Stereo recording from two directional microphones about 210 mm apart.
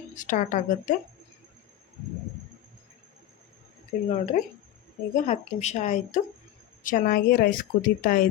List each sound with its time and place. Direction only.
0.1 s a woman's voice: 35° left (ahead or behind)
4.1 s a woman's voice: 35° left (ahead or behind)